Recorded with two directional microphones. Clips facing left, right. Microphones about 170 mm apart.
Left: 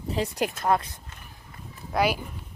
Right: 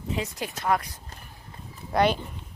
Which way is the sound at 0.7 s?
25° left (ahead or behind).